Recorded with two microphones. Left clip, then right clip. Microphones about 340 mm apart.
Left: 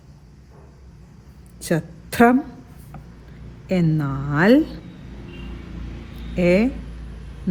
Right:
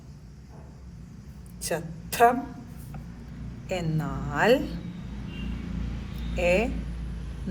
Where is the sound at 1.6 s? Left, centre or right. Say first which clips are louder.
Left 6 dB; left.